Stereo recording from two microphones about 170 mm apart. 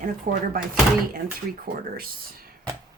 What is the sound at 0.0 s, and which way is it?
Speech, 60° right (ahead or behind).